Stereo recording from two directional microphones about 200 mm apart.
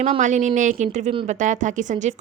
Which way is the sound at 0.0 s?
35° right (ahead or behind).